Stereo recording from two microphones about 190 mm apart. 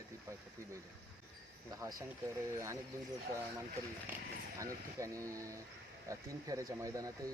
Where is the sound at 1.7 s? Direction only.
15° right (ahead or behind).